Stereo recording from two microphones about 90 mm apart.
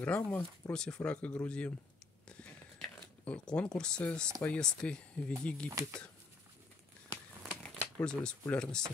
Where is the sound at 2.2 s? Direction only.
10° left (ahead or behind).